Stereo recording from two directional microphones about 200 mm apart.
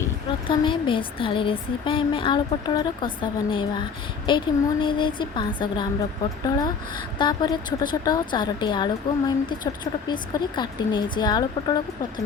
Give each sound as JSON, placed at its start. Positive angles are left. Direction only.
{"t": 0.4, "sound": "a woman's voice", "side_deg": 25}